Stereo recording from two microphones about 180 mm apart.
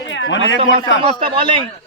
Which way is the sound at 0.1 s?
90° left.